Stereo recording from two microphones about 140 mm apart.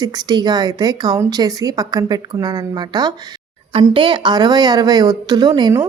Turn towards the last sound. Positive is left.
turn(degrees=-30)  # may be behind; listen again after turning